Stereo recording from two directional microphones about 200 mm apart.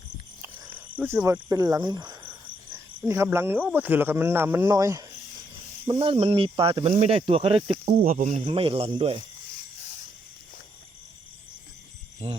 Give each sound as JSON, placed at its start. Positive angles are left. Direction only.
{"t": 0.9, "sound": "speech", "side_deg": -10}
{"t": 5.9, "sound": "speech", "side_deg": -30}
{"t": 8.0, "sound": "speech", "side_deg": -40}
{"t": 12.2, "sound": "speech", "side_deg": -35}